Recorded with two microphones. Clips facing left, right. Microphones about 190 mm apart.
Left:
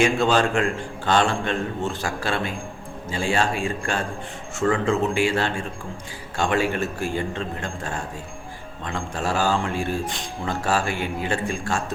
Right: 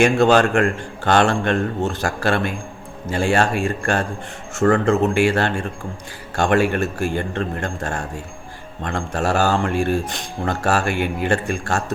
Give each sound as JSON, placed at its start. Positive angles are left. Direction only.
{"t": 0.0, "sound": "a man's voice", "side_deg": -65}